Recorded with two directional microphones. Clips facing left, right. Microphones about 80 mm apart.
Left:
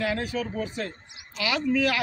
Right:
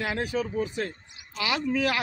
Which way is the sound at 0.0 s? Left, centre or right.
Right.